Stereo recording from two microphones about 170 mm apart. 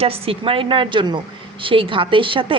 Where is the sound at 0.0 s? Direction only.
35° right (ahead or behind).